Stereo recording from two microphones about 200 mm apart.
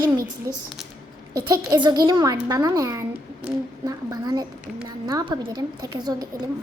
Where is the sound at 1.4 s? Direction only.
15° right (ahead or behind).